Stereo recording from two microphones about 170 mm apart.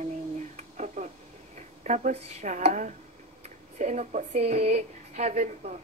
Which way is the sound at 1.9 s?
40° right (ahead or behind).